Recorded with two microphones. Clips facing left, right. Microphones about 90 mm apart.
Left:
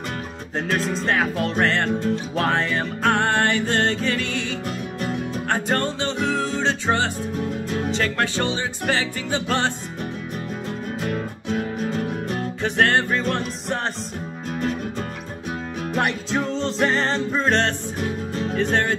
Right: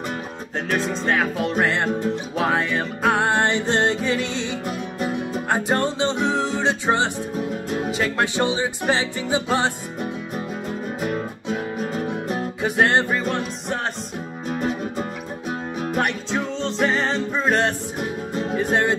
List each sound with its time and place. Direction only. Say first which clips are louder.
0.7 s music: right 1 dB; centre (ahead or behind)
11.0 s music: right 1 dB; 10° right (ahead or behind)
13.2 s music: even; centre (ahead or behind)
14.6 s music: even; 10° right (ahead or behind)